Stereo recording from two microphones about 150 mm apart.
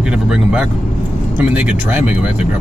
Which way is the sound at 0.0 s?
5° right (ahead or behind).